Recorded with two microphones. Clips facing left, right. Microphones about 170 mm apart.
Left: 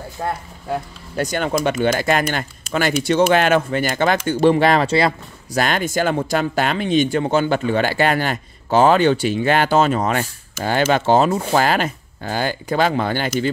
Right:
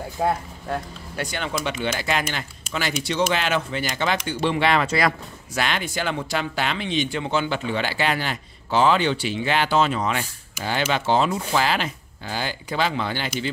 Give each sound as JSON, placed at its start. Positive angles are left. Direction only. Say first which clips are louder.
{"t": 0.2, "sound": "speech", "louder": "right 2 dB", "side_deg": -15}
{"t": 1.1, "sound": "speech", "louder": "left 8 dB", "side_deg": 45}
{"t": 4.8, "sound": "speech", "louder": "left 5 dB", "side_deg": 30}
{"t": 5.6, "sound": "speech", "louder": "left 7 dB", "side_deg": 45}